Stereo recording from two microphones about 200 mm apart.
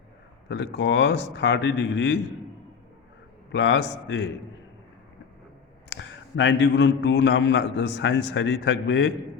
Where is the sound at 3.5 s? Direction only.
70° left (ahead or behind).